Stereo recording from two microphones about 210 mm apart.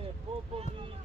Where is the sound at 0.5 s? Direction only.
30° right (ahead or behind).